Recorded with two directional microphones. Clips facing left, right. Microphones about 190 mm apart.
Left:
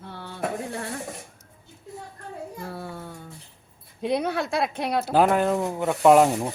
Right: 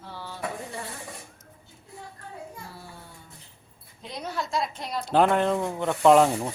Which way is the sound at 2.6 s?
60° left (ahead or behind).